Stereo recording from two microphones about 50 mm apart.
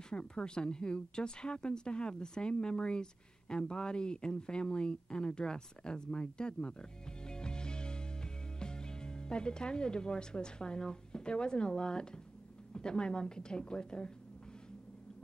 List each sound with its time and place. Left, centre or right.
0.1 s a woman's voice: centre